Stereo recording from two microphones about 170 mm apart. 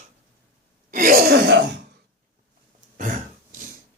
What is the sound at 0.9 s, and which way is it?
Groan, 55° right (ahead or behind).